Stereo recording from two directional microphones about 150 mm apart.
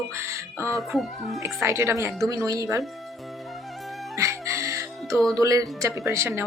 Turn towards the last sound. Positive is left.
turn(degrees=-20)  # may be behind; listen again after turning